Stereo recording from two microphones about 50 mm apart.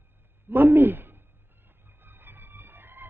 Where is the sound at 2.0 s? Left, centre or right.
Right.